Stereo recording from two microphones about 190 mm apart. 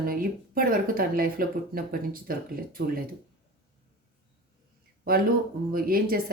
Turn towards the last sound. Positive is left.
turn(degrees=-50)  # may be behind; listen again after turning